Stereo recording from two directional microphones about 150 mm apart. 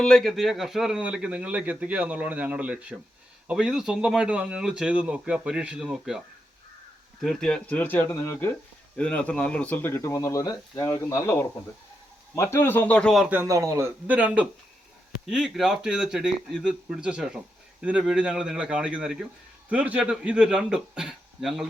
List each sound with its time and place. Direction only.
0.0 s speech: 5° left (ahead or behind)
13.5 s speech: 20° right (ahead or behind); by 21.7 s 5° right (ahead or behind)